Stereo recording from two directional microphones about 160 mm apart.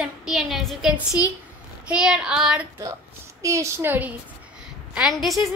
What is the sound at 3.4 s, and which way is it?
Speech, 20° right (ahead or behind).